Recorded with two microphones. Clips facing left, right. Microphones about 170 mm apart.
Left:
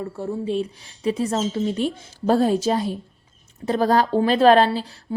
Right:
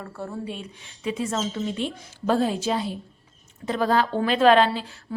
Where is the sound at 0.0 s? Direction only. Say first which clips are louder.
Left 6 dB; 25° left (ahead or behind).